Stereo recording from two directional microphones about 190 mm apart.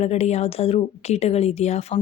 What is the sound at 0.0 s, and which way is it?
Speech, 35° left (ahead or behind).